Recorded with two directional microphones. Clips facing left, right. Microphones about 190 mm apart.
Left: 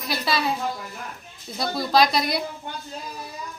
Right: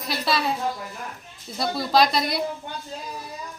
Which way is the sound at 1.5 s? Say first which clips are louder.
Even; centre (ahead or behind).